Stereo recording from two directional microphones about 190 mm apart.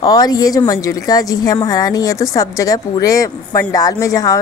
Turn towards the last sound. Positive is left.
turn(degrees=15)  # may be behind; listen again after turning